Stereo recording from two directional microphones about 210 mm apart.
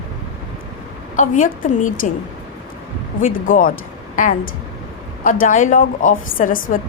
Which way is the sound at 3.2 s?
40° left (ahead or behind).